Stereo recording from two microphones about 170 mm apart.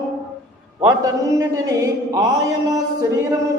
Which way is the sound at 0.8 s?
20° right (ahead or behind).